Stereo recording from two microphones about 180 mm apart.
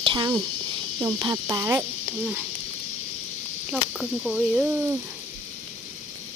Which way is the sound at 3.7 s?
5° right (ahead or behind).